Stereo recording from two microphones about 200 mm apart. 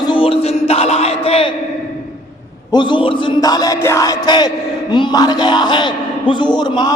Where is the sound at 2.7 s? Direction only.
25° left (ahead or behind).